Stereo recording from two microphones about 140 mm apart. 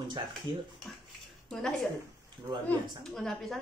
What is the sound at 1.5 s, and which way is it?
Speech, 5° left (ahead or behind).